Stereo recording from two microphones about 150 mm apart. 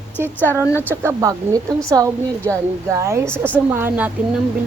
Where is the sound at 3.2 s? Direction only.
10° left (ahead or behind).